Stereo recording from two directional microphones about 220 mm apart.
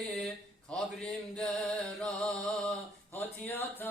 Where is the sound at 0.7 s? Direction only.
Centre (ahead or behind).